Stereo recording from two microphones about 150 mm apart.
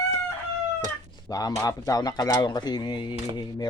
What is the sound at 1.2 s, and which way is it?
Speech, 25° left (ahead or behind).